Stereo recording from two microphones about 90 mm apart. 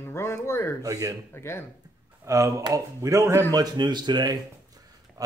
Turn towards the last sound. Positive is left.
turn(degrees=-40)  # may be behind; listen again after turning